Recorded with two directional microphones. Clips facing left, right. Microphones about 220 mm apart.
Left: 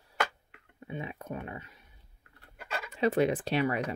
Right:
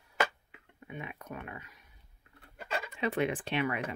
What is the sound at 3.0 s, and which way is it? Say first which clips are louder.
Speech: left 6 dB; 40° left (ahead or behind).